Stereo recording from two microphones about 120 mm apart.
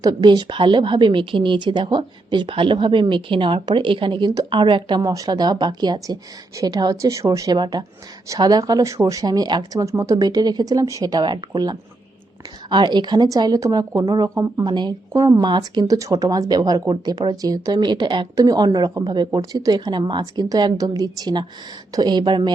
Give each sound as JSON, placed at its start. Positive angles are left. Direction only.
{"t": 0.0, "sound": "a woman's voice", "side_deg": -35}